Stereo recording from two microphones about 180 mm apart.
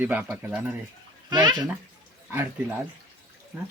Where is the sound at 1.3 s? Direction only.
25° right (ahead or behind).